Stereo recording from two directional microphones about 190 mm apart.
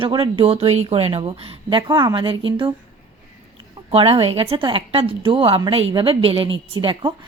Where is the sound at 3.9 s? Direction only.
30° right (ahead or behind).